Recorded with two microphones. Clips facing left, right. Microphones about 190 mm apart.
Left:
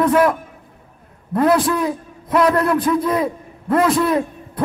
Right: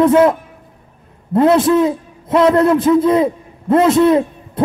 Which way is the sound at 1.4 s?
25° right (ahead or behind).